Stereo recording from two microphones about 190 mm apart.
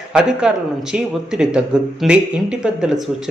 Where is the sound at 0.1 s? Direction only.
5° right (ahead or behind).